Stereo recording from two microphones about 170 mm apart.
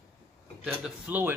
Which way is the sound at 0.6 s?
5° right (ahead or behind).